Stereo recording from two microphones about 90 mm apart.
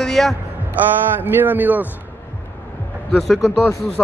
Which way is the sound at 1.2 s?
20° right (ahead or behind).